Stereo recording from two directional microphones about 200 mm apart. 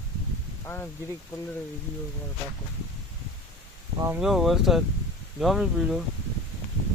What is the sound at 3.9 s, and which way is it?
Speech, 15° right (ahead or behind).